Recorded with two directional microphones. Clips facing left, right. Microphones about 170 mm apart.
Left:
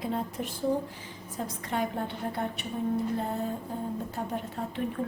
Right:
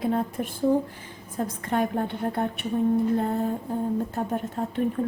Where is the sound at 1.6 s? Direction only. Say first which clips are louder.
Right 5 dB; 50° right (ahead or behind).